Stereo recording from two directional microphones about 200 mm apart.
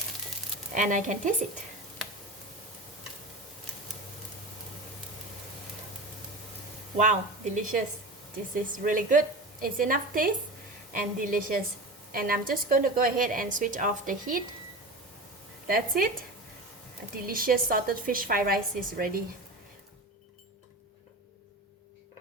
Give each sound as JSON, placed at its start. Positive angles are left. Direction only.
{"t": 0.7, "sound": "speech", "side_deg": -40}
{"t": 6.9, "sound": "speech", "side_deg": -35}
{"t": 8.8, "sound": "a woman's voice", "side_deg": -40}
{"t": 15.6, "sound": "a woman's voice", "side_deg": -50}
{"t": 17.2, "sound": "a woman's voice", "side_deg": -45}